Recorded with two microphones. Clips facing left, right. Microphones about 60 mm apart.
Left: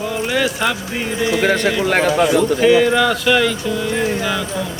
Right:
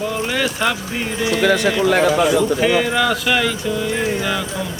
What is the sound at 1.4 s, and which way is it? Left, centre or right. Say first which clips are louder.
Speech: right 3 dB; left.